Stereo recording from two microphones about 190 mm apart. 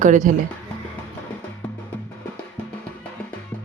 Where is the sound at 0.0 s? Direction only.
40° right (ahead or behind).